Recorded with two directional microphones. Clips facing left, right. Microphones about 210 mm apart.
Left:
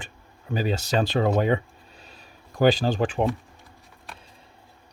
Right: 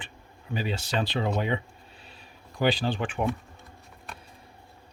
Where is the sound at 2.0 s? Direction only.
40° left (ahead or behind).